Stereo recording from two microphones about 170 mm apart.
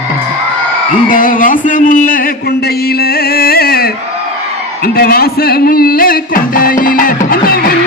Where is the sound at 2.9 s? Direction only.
65° left (ahead or behind).